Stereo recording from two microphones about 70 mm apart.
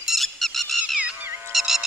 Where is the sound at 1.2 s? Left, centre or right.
Right.